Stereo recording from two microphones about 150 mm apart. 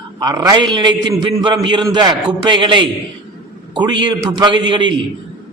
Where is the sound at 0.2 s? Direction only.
25° right (ahead or behind).